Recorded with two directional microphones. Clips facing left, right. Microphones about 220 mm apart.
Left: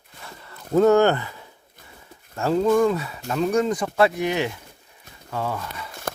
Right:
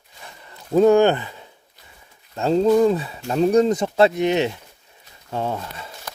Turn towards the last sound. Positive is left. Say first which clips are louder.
# right 2 dB
turn(degrees=-25)  # may be behind; listen again after turning